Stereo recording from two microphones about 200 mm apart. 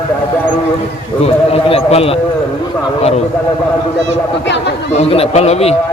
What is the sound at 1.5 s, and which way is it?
Speech, 30° left (ahead or behind).